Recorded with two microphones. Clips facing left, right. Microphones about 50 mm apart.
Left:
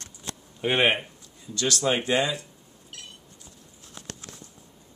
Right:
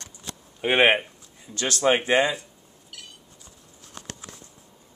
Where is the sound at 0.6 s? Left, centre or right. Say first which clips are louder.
Right 3 dB; centre.